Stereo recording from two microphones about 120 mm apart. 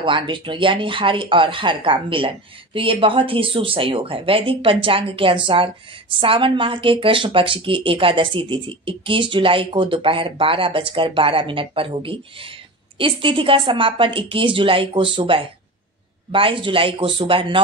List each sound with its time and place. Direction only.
0.0 s speech: 45° right (ahead or behind)